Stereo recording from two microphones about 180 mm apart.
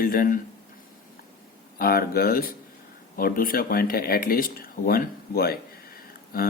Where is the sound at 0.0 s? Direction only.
50° left (ahead or behind).